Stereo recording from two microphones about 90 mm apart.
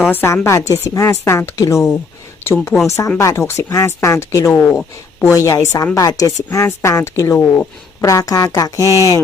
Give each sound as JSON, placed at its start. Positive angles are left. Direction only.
{"t": 0.0, "sound": "a woman's voice", "side_deg": 25}
{"t": 0.4, "sound": "a woman's voice", "side_deg": 35}
{"t": 7.3, "sound": "a woman's voice", "side_deg": 25}
{"t": 8.0, "sound": "a woman's voice", "side_deg": 40}